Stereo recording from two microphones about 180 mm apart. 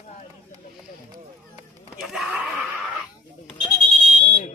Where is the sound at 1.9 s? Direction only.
Centre (ahead or behind).